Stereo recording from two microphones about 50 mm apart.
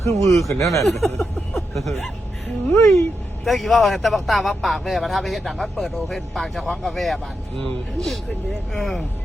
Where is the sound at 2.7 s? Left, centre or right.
Left.